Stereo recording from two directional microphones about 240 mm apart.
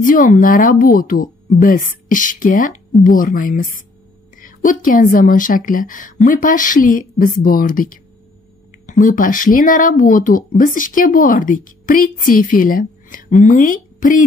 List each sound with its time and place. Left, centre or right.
0.0 s speech: left